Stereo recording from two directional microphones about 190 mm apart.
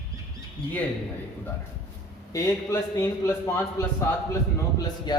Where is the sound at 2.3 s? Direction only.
15° left (ahead or behind).